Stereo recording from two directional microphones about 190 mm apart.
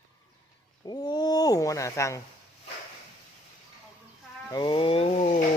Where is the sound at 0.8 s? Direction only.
20° left (ahead or behind).